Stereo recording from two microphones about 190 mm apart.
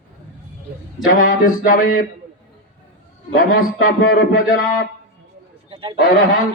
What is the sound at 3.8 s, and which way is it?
Mantra, 50° left (ahead or behind).